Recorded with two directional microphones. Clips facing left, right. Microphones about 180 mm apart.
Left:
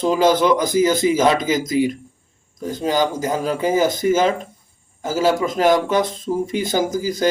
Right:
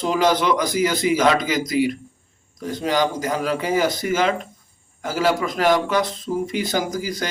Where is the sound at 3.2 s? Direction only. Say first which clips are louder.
Left 2 dB; 25° left (ahead or behind).